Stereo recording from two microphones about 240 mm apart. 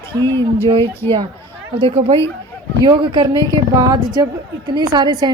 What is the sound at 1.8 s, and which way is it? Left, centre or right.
A woman's voice, right.